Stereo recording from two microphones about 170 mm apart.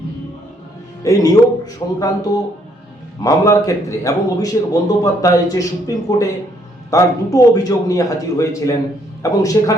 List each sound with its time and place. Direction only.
1.0 s a man's voice: 20° left (ahead or behind)
3.2 s a man's voice: 20° left (ahead or behind)